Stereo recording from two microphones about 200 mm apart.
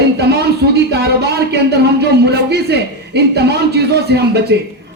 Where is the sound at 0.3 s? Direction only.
55° right (ahead or behind).